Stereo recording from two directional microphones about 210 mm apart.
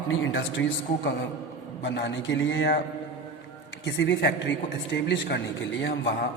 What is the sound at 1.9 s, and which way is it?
Speech, 60° left (ahead or behind).